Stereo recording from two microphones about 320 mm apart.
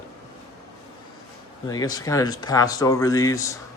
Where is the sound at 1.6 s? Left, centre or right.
Centre.